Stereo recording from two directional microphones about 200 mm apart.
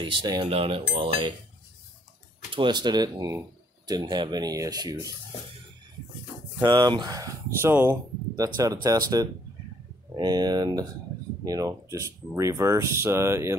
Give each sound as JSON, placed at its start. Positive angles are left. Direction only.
{"t": 0.0, "sound": "speech", "side_deg": -20}
{"t": 2.5, "sound": "speech", "side_deg": -20}
{"t": 6.6, "sound": "speech", "side_deg": -20}